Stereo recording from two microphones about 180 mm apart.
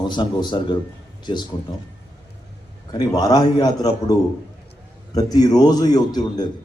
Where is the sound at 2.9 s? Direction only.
20° left (ahead or behind).